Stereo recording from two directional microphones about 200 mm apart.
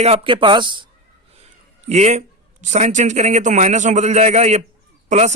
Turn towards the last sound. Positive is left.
turn(degrees=-35)  # may be behind; listen again after turning